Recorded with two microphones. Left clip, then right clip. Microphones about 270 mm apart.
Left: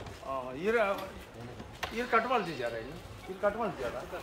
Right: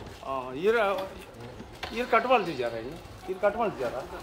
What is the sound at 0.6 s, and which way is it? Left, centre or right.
Speech, right.